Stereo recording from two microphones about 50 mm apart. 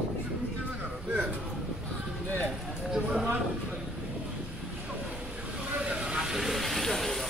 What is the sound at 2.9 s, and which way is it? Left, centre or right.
Speech, centre.